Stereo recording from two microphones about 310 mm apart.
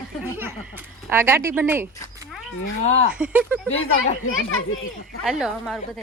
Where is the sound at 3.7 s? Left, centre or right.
Left.